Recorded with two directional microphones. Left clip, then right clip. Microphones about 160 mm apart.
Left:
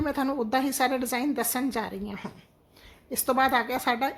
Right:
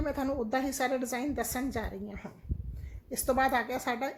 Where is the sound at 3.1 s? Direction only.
10° left (ahead or behind).